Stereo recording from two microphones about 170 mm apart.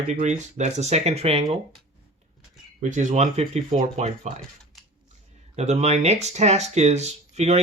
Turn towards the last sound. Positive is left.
turn(degrees=-40)  # may be behind; listen again after turning